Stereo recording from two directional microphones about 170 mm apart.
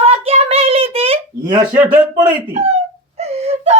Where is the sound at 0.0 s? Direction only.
35° right (ahead or behind).